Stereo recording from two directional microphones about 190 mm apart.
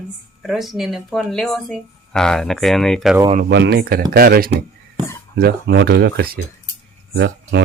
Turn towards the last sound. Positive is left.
turn(degrees=-70)  # may be behind; listen again after turning